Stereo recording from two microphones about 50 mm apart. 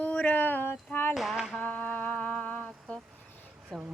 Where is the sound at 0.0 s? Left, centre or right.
Left.